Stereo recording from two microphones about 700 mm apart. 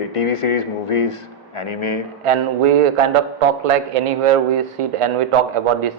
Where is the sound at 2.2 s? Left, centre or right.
Right.